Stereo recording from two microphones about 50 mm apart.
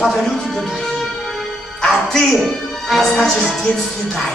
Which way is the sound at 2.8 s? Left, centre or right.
Centre.